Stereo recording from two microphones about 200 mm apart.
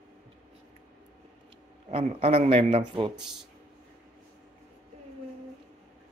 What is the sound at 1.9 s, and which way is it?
Speech, 30° right (ahead or behind).